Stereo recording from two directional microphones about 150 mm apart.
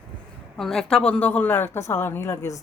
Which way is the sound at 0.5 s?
Centre (ahead or behind).